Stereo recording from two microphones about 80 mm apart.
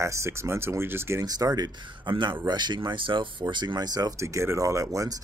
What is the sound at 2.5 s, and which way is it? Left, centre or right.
Speech, right.